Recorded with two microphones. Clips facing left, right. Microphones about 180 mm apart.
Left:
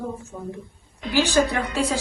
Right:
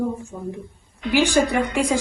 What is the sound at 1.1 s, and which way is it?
Speech, 15° right (ahead or behind).